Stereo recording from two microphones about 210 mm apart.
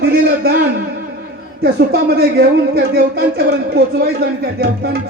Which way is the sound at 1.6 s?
50° right (ahead or behind).